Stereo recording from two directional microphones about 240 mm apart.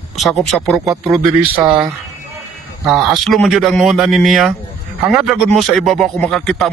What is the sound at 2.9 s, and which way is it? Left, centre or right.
Speech, centre.